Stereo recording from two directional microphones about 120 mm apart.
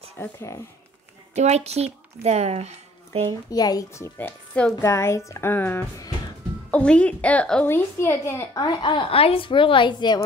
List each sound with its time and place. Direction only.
0.2 s a child's voice: 25° left (ahead or behind)
1.3 s speech: 65° right (ahead or behind)
3.4 s a child's voice: 30° left (ahead or behind)
8.6 s a woman's voice: 40° left (ahead or behind)